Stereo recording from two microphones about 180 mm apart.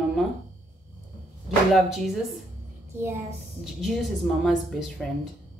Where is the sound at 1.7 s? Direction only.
Centre (ahead or behind).